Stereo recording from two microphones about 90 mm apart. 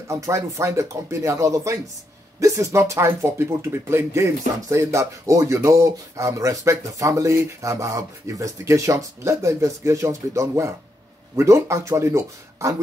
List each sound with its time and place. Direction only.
0.1 s speech: 35° right (ahead or behind)